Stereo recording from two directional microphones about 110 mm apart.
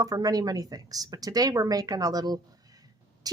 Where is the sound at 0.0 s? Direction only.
35° right (ahead or behind).